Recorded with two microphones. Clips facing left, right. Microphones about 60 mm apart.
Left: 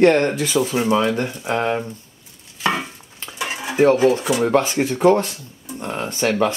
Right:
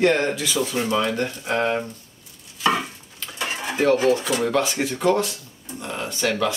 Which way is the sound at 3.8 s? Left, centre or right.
Left.